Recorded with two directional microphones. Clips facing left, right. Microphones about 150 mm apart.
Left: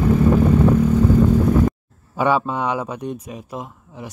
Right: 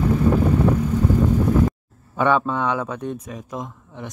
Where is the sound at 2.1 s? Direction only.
10° left (ahead or behind).